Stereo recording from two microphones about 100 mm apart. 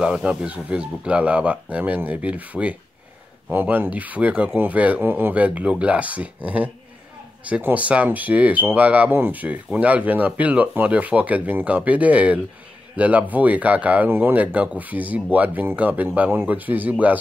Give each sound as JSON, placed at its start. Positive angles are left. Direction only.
{"t": 0.0, "sound": "speech", "side_deg": -10}